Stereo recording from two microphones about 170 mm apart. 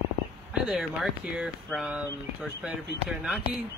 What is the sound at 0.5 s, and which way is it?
Speech, centre (ahead or behind).